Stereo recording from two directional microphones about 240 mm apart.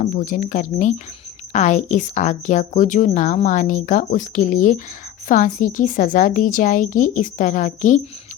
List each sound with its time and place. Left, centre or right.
0.0 s a woman's voice: left